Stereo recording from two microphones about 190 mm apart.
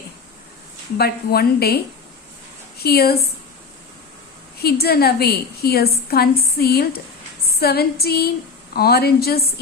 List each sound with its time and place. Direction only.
0.9 s a woman's voice: 55° left (ahead or behind)
4.5 s a woman's voice: 55° left (ahead or behind)
7.4 s female singing: 55° left (ahead or behind)
8.7 s a woman's voice: 55° left (ahead or behind)